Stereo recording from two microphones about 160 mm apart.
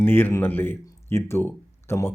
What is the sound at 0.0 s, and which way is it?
Speech, 15° left (ahead or behind).